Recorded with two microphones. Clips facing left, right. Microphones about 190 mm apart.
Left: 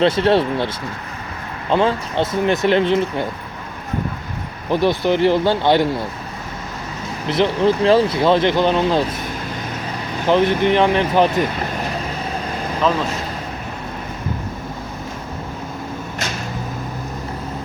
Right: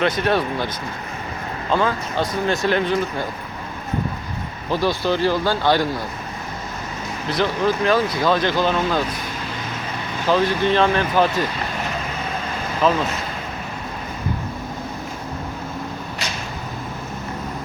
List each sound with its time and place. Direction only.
0.0 s speech: 30° left (ahead or behind)
1.7 s speech: 25° left (ahead or behind)
4.7 s speech: 20° left (ahead or behind)
7.3 s speech: 25° left (ahead or behind)
10.2 s speech: 20° left (ahead or behind)